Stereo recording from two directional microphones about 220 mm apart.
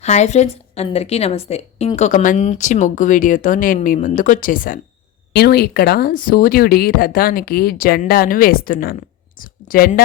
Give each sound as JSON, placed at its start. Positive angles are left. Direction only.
{"t": 0.0, "sound": "a woman's voice", "side_deg": 30}